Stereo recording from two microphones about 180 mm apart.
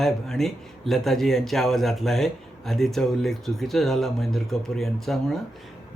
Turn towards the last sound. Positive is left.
turn(degrees=0)  # may be behind; listen again after turning